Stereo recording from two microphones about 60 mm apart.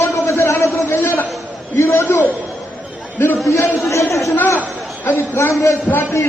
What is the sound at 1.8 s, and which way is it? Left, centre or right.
Speech, left.